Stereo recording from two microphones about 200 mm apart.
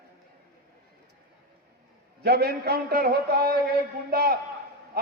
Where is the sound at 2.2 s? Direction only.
50° right (ahead or behind).